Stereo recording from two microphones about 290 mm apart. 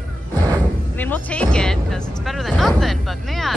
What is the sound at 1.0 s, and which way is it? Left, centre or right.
Speech, centre.